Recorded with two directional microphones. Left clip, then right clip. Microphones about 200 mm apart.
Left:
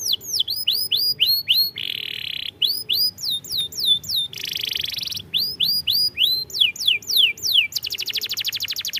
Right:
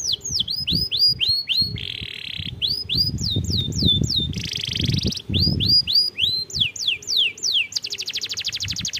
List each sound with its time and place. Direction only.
0.0 s bird: 25° left (ahead or behind)
2.6 s squawk: 25° left (ahead or behind)
4.7 s bird: 20° left (ahead or behind)
7.1 s a sound: 25° left (ahead or behind)